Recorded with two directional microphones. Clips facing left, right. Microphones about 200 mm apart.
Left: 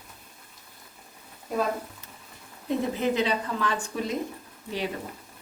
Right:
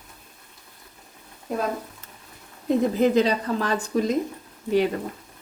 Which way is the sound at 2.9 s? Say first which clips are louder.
Right 6 dB; 40° right (ahead or behind).